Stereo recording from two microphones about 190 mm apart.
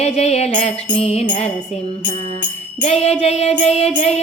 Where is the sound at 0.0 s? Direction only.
35° left (ahead or behind).